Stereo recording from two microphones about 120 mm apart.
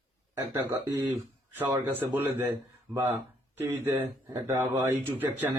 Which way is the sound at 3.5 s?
20° right (ahead or behind).